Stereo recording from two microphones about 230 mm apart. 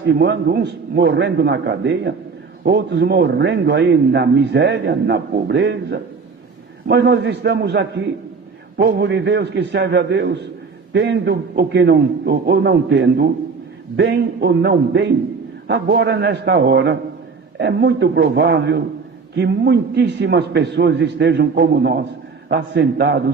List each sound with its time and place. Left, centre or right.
0.0 s a man's voice: right